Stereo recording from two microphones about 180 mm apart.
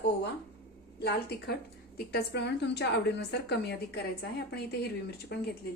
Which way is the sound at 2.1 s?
70° left (ahead or behind).